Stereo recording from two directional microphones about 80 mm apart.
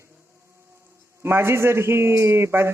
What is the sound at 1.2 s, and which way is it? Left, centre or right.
Speech, right.